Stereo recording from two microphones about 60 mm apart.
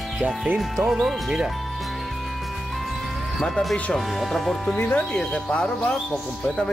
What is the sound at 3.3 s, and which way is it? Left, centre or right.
Speech, centre.